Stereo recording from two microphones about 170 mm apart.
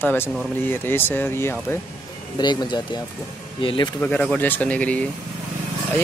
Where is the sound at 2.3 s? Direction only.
25° left (ahead or behind).